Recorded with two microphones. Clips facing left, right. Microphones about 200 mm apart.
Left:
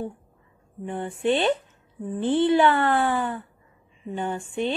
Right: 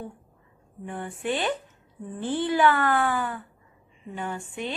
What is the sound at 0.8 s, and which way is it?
Speech, 25° left (ahead or behind).